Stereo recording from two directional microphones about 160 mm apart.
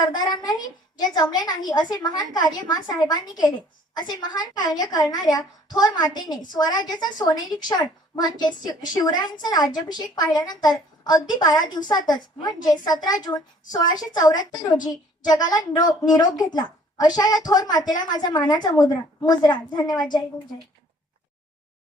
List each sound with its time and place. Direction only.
0.1 s a woman's voice: 25° left (ahead or behind)